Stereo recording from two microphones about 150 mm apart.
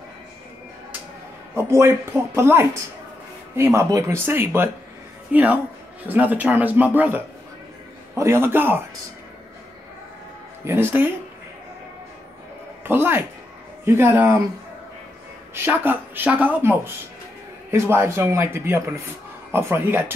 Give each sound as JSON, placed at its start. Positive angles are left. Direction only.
{"t": 1.5, "sound": "speech", "side_deg": -20}
{"t": 10.6, "sound": "speech", "side_deg": -15}
{"t": 12.8, "sound": "a man's voice", "side_deg": -15}
{"t": 15.5, "sound": "speech", "side_deg": -15}